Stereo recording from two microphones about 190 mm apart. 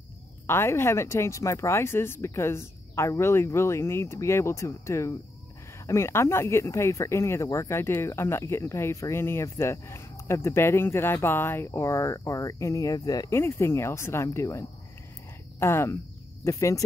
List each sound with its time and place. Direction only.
0.5 s speech: 15° left (ahead or behind)